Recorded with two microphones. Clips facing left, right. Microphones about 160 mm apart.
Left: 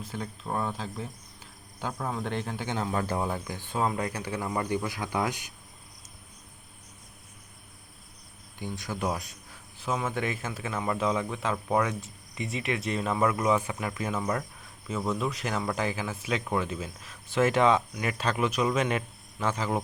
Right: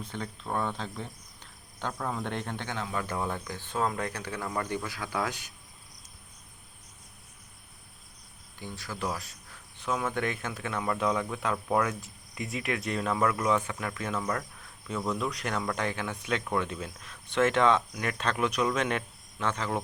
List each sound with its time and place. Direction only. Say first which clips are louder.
0.0 s speech: left 1 dB; 5° left (ahead or behind)
2.7 s speech: left 6 dB; 40° left (ahead or behind)
3.2 s speech: left 2 dB; 10° left (ahead or behind)
8.5 s speech: left 4 dB; 15° left (ahead or behind)
9.7 s speech: even; 5° left (ahead or behind)